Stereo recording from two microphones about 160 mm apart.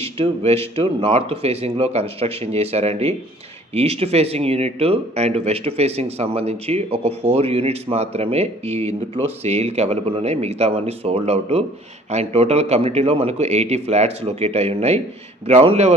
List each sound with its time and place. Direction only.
0.0 s a man's voice: 40° right (ahead or behind)